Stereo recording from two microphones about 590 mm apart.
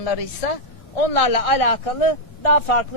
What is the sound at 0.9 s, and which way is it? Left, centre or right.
Speech, left.